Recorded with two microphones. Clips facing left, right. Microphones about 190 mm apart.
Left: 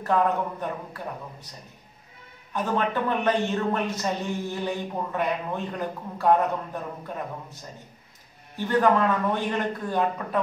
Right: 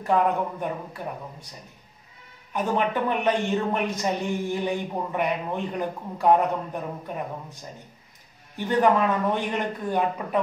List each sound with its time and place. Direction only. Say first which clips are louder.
0.0 s a man's voice: right 1 dB; 15° right (ahead or behind)
2.5 s a man's voice: right 1 dB; 15° right (ahead or behind)
8.5 s a man's voice: even; 15° right (ahead or behind)